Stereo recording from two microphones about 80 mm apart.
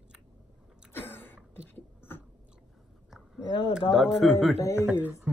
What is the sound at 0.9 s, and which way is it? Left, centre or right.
Throat clearing, left.